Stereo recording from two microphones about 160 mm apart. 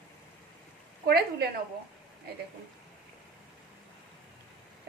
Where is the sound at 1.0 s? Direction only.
75° right (ahead or behind).